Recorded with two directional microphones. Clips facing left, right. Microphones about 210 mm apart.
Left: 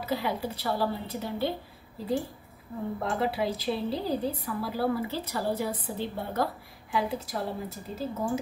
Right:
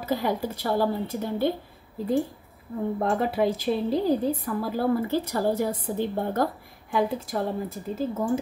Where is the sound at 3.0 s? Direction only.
50° right (ahead or behind).